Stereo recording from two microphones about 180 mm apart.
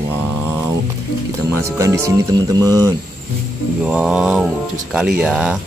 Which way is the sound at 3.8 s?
5° right (ahead or behind).